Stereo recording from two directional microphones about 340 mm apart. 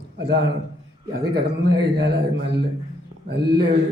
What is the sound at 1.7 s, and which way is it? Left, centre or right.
Speech, right.